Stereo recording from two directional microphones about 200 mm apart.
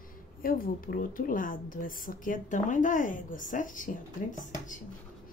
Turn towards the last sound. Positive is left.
turn(degrees=40)  # may be behind; listen again after turning